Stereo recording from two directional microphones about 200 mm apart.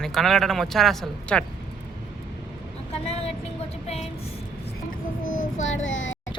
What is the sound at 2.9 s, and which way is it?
Vehicle, 30° left (ahead or behind).